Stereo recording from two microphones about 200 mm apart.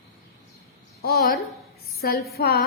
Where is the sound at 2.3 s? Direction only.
50° left (ahead or behind).